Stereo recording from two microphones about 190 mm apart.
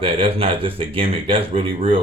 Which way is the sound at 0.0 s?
30° right (ahead or behind).